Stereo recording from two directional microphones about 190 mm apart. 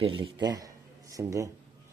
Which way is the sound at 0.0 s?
25° right (ahead or behind).